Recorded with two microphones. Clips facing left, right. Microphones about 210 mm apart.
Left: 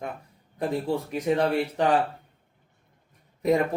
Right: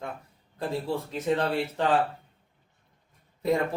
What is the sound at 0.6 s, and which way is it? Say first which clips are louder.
Speech: left 3 dB; 15° left (ahead or behind).